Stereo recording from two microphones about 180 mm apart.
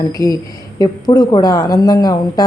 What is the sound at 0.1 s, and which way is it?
A woman's voice, 20° left (ahead or behind).